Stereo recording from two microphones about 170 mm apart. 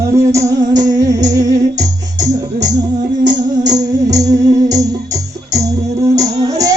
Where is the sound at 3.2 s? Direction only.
20° right (ahead or behind).